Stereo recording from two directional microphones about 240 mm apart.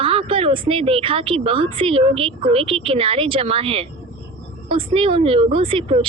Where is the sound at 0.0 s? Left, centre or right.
Right.